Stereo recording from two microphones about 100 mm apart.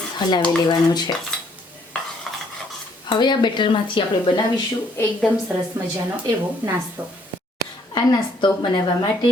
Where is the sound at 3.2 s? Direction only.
50° left (ahead or behind).